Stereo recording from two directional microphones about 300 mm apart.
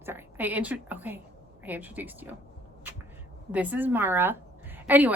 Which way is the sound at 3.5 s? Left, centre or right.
Centre.